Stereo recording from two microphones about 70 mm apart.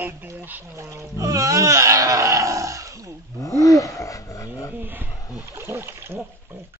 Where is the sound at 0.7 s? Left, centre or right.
Right.